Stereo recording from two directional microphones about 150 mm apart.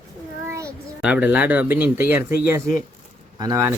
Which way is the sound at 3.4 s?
20° right (ahead or behind).